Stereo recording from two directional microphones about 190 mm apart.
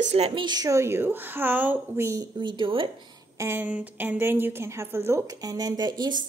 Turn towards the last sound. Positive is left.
turn(degrees=-25)  # may be behind; listen again after turning